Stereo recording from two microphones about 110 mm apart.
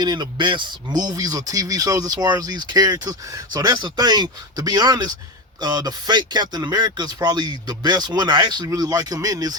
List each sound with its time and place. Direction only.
0.0 s speech: 40° right (ahead or behind)